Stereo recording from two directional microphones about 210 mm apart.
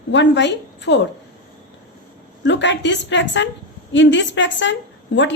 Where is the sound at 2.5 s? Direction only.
60° left (ahead or behind).